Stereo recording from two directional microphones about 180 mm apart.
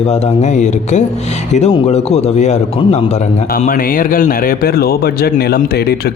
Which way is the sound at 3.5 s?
50° left (ahead or behind).